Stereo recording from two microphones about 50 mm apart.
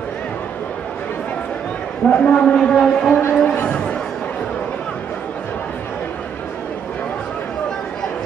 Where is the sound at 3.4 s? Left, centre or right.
Left.